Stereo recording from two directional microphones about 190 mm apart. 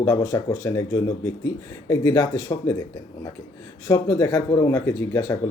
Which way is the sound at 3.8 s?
15° left (ahead or behind).